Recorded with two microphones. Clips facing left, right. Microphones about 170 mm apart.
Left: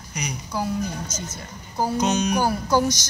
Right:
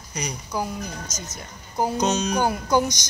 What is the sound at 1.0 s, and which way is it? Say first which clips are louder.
Speech: left 3 dB; 30° left (ahead or behind).